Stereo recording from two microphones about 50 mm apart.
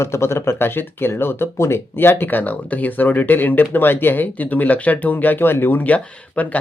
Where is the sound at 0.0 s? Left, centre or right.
Left.